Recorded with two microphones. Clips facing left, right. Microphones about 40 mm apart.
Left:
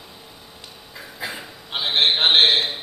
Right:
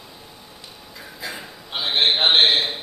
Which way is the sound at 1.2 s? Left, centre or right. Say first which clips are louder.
Left 2 dB; left.